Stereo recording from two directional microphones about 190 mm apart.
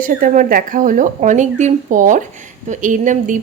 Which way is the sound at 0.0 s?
45° right (ahead or behind).